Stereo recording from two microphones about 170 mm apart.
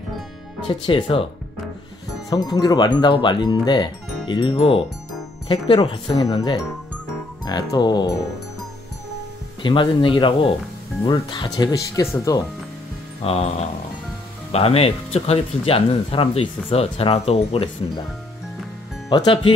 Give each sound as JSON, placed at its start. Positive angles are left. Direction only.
{"t": 0.7, "sound": "speech", "side_deg": 30}
{"t": 2.2, "sound": "speech", "side_deg": 20}
{"t": 9.6, "sound": "speech", "side_deg": 30}
{"t": 13.2, "sound": "speech", "side_deg": 35}
{"t": 19.0, "sound": "speech", "side_deg": 30}